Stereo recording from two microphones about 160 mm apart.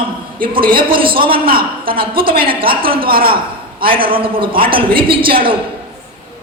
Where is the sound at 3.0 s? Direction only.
65° right (ahead or behind).